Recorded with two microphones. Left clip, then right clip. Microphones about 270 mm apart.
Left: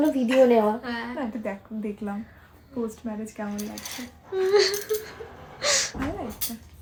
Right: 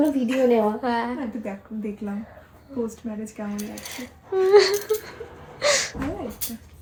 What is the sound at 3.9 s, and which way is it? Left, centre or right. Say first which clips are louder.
Speech: right 5 dB; centre.